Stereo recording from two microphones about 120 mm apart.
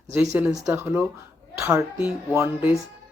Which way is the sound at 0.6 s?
20° right (ahead or behind).